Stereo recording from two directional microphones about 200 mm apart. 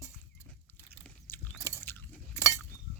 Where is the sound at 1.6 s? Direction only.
10° left (ahead or behind).